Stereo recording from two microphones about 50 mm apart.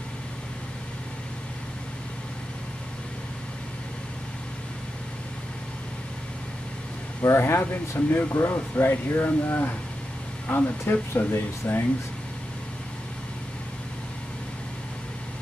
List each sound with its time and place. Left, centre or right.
7.2 s speech: left
8.3 s speech: left
8.5 s speech: left